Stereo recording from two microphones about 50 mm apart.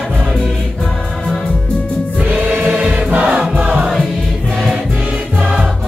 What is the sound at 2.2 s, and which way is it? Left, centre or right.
Choir, right.